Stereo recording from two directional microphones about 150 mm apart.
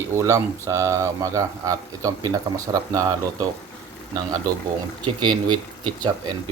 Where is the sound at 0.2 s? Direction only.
20° right (ahead or behind).